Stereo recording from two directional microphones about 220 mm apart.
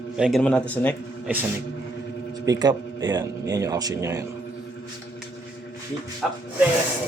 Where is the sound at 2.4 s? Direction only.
15° right (ahead or behind).